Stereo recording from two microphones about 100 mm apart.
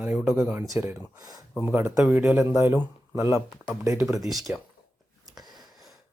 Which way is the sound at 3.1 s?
30° right (ahead or behind).